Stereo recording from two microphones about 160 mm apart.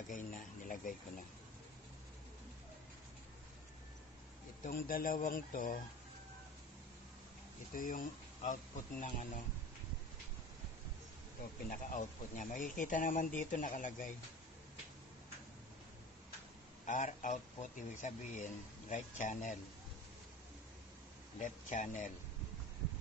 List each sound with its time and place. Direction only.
0.1 s a sound: 55° left (ahead or behind)
4.6 s speech: 60° left (ahead or behind)
7.7 s speech: 55° left (ahead or behind)
11.7 s speech: 55° left (ahead or behind)
16.8 s speech: 50° left (ahead or behind)
21.4 s speech: 50° left (ahead or behind)